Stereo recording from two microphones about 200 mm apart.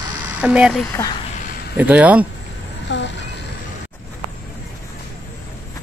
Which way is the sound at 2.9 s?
60° left (ahead or behind).